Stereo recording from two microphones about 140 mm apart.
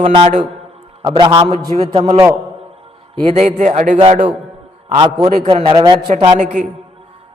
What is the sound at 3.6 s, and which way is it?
Speech, 60° right (ahead or behind).